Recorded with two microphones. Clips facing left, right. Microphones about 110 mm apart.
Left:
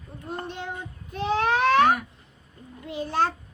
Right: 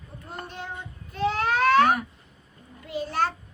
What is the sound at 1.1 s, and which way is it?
Baby cry, 20° left (ahead or behind).